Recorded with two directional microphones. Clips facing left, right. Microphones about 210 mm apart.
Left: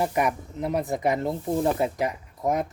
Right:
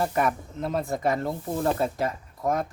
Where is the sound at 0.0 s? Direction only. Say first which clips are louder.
Left 1 dB; 15° left (ahead or behind).